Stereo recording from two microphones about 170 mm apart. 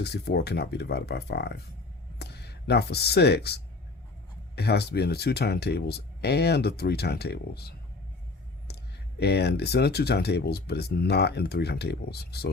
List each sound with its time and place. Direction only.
0.0 s speech: 75° left (ahead or behind)